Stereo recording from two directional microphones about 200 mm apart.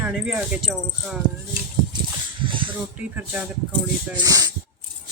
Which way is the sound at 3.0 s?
5° right (ahead or behind).